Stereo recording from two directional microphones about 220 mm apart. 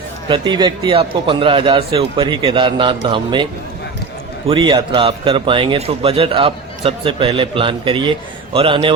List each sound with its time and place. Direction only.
0.3 s a man's voice: 20° right (ahead or behind)
4.4 s a man's voice: 20° right (ahead or behind)